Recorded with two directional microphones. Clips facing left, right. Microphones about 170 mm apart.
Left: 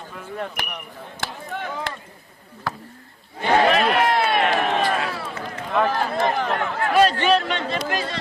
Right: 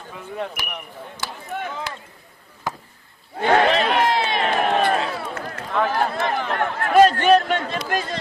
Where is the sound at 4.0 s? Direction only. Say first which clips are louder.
Left 1 dB; 60° left (ahead or behind).